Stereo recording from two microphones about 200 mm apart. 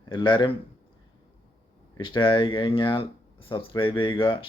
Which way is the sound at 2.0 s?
25° left (ahead or behind).